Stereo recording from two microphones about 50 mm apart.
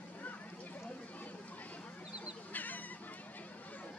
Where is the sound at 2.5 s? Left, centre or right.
Left.